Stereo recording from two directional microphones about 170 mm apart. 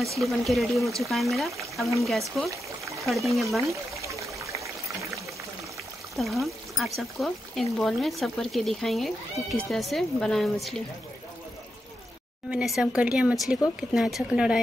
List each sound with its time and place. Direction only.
0.2 s speech: centre (ahead or behind)
2.5 s pour: 20° right (ahead or behind)
3.1 s speech: centre (ahead or behind)
4.0 s a sound: 20° right (ahead or behind)
6.1 s speech: centre (ahead or behind)
12.4 s speech: 5° right (ahead or behind)